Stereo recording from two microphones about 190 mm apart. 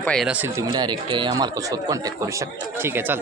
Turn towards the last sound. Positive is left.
turn(degrees=-10)  # may be behind; listen again after turning